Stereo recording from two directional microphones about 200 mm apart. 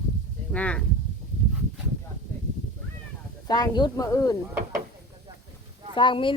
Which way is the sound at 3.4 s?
20° left (ahead or behind).